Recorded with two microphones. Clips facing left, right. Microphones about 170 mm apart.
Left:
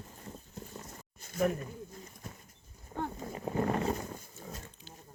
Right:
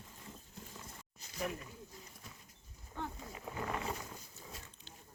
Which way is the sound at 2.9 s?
45° left (ahead or behind).